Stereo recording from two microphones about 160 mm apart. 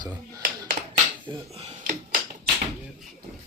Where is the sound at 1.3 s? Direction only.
30° right (ahead or behind).